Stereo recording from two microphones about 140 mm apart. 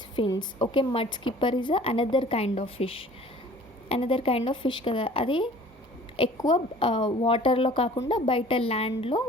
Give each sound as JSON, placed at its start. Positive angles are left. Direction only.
{"t": 0.3, "sound": "a woman's voice", "side_deg": 30}